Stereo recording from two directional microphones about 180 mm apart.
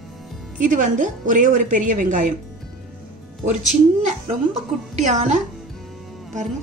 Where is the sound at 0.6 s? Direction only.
45° right (ahead or behind).